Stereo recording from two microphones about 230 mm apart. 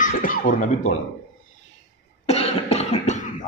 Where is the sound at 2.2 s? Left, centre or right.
Left.